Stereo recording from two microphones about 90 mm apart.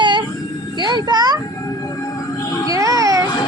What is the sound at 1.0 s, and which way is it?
Speech, 50° right (ahead or behind).